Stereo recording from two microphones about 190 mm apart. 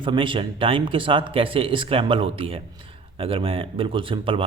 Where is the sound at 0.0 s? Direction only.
25° right (ahead or behind).